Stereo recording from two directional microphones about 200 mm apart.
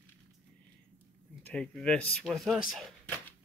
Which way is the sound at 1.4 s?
5° left (ahead or behind).